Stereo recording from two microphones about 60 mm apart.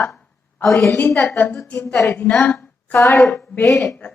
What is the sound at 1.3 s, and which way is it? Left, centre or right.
A woman's voice, left.